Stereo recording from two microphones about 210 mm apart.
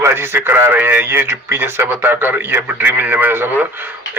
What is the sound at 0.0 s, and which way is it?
A man's voice, 10° right (ahead or behind).